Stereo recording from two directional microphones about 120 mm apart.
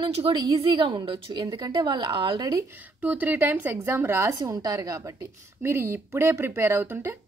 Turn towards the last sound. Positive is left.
turn(degrees=-20)  # may be behind; listen again after turning